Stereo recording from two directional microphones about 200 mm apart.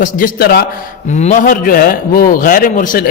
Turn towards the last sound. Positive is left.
turn(degrees=40)  # may be behind; listen again after turning